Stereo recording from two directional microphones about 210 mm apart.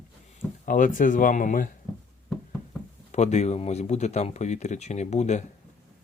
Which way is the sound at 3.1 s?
30° left (ahead or behind).